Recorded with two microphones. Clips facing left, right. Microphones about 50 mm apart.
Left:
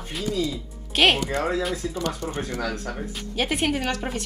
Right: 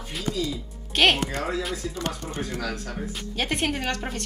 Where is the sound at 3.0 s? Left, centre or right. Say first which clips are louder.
Left 2 dB; centre.